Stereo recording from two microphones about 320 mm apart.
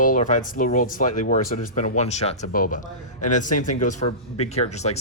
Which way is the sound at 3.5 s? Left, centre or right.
Left.